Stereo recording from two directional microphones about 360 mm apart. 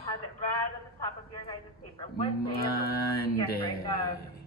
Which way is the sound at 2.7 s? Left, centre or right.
Left.